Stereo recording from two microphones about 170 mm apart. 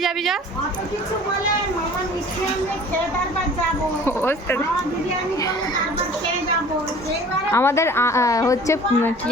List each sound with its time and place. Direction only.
4.0 s a woman's voice: 15° left (ahead or behind)
7.5 s a woman's voice: 15° left (ahead or behind)